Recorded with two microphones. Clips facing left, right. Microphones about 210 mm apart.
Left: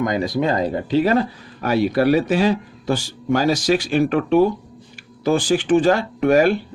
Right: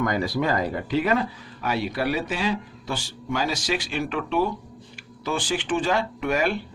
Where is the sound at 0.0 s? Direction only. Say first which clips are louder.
Left 4 dB; 20° left (ahead or behind).